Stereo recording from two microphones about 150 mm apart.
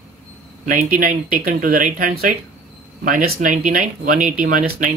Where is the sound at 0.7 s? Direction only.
65° right (ahead or behind).